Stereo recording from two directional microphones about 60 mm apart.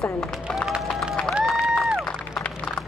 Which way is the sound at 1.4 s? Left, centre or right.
Centre.